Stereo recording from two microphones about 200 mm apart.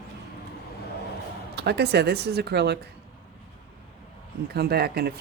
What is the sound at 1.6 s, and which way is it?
Speech, 55° right (ahead or behind).